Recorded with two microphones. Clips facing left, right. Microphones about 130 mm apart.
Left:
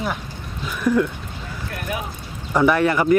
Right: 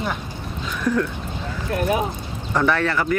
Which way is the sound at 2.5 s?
10° left (ahead or behind).